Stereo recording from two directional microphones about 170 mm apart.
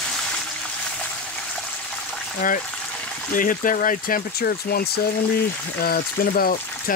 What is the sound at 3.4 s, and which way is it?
Speech, 55° left (ahead or behind).